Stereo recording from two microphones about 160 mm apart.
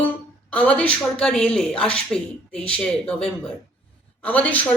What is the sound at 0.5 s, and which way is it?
Speech, 10° left (ahead or behind).